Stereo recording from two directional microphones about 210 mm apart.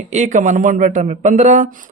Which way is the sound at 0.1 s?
35° right (ahead or behind).